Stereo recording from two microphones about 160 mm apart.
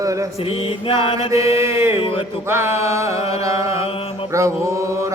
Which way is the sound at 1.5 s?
15° right (ahead or behind).